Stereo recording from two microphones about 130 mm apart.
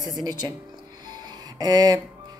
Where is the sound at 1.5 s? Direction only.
30° right (ahead or behind).